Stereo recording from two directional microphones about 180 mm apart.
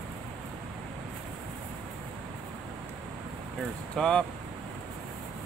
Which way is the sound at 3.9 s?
5° left (ahead or behind).